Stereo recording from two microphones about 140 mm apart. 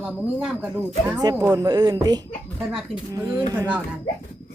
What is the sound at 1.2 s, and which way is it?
Speech, 25° right (ahead or behind).